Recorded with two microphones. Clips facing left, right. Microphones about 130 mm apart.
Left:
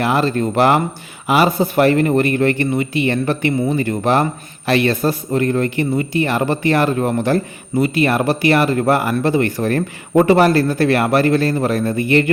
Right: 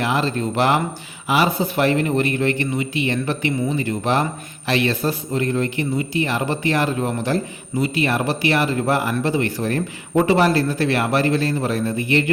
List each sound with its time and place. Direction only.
0.0 s a man's voice: 50° left (ahead or behind)